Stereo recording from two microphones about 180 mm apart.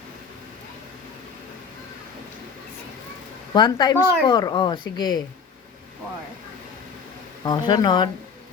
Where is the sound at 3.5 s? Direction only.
25° left (ahead or behind).